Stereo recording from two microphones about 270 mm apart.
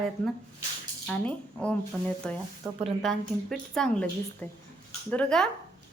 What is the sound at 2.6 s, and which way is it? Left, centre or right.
Speech, centre.